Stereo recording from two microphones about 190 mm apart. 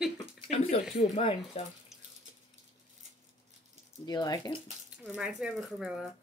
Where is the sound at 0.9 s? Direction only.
30° left (ahead or behind).